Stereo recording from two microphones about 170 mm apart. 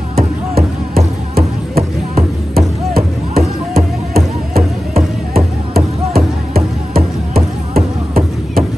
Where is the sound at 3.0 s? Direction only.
65° right (ahead or behind).